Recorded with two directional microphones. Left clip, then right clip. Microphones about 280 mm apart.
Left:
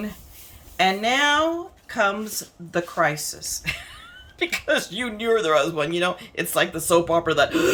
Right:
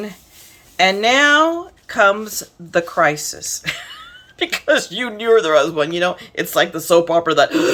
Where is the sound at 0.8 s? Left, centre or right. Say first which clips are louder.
Right 7 dB; centre.